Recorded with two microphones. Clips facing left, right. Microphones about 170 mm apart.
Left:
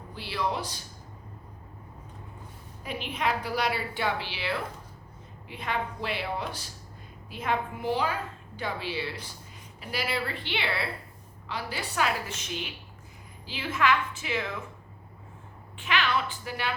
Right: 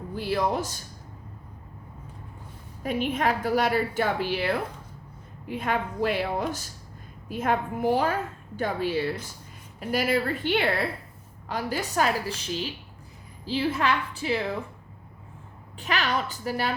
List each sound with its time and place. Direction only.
0.1 s a woman's voice: 45° right (ahead or behind)
2.8 s a woman's voice: 45° right (ahead or behind)
15.8 s a woman's voice: 40° right (ahead or behind)